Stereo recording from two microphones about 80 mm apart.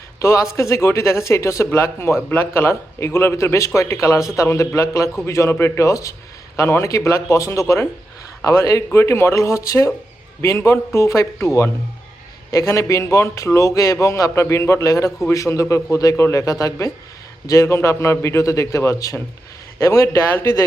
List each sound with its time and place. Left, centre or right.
0.2 s a man's voice: left
17.7 s a man's voice: left